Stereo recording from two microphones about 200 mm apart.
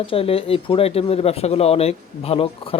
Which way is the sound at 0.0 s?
30° left (ahead or behind).